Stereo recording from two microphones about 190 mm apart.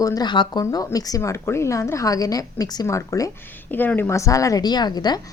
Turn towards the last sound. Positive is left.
turn(degrees=20)  # may be behind; listen again after turning